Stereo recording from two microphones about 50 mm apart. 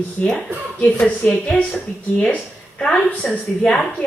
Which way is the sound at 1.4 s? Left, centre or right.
Left.